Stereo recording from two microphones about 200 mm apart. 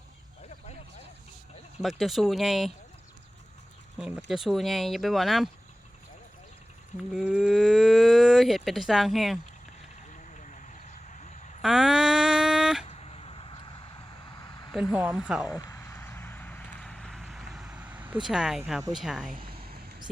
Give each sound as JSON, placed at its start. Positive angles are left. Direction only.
{"t": 1.8, "sound": "cattle", "side_deg": 0}
{"t": 3.9, "sound": "speech", "side_deg": -5}
{"t": 4.3, "sound": "cattle", "side_deg": 0}
{"t": 7.1, "sound": "cattle", "side_deg": -5}
{"t": 10.3, "sound": "a sound", "side_deg": 40}
{"t": 11.6, "sound": "a sound", "side_deg": -5}
{"t": 12.9, "sound": "vehicle", "side_deg": 30}
{"t": 14.9, "sound": "cattle", "side_deg": -5}
{"t": 15.4, "sound": "a sound", "side_deg": 15}
{"t": 18.9, "sound": "cattle", "side_deg": 0}